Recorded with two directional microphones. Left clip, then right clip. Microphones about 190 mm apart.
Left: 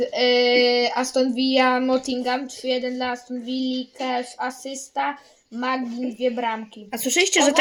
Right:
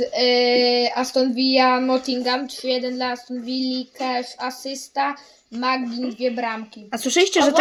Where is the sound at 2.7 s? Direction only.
5° right (ahead or behind).